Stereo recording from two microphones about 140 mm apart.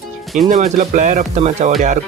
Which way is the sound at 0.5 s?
60° right (ahead or behind).